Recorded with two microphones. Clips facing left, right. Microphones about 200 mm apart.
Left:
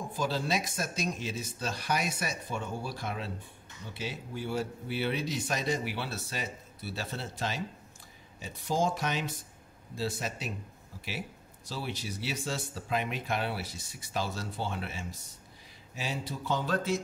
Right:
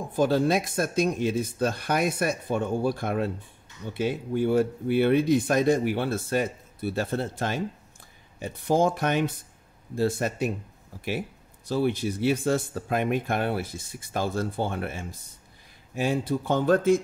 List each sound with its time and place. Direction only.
0.1 s speech: 55° right (ahead or behind)
11.7 s speech: 55° right (ahead or behind)